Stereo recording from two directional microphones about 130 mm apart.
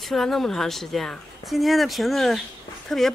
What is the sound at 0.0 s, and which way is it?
Speech, centre (ahead or behind).